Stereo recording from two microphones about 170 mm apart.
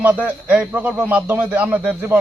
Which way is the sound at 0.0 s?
10° right (ahead or behind).